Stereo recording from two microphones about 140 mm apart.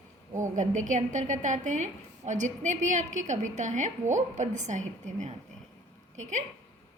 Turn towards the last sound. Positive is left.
turn(degrees=-60)  # may be behind; listen again after turning